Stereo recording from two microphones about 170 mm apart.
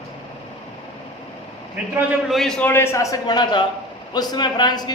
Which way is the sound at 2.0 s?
Centre (ahead or behind).